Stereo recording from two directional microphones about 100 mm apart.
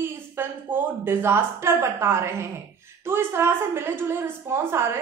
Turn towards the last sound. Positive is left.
turn(degrees=-25)  # may be behind; listen again after turning